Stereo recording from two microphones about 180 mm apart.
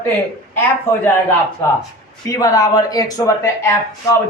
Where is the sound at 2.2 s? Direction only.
20° left (ahead or behind).